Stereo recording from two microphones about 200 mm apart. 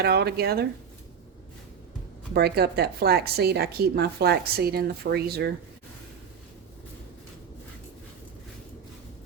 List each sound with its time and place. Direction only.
0.0 s a woman's voice: 55° right (ahead or behind)
2.3 s a woman's voice: 55° right (ahead or behind)